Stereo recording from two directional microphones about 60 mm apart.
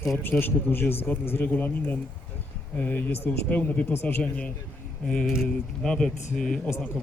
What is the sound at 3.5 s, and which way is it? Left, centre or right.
Speech, left.